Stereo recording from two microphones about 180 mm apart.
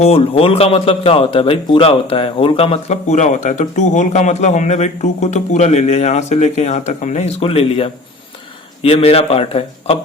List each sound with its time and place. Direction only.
0.0 s a man's voice: 30° left (ahead or behind)